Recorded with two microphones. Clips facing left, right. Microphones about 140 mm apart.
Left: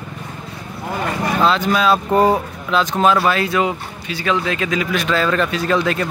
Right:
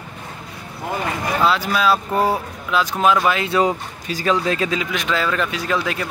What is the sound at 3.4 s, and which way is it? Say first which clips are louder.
A man's voice: right 1 dB; 35° right (ahead or behind).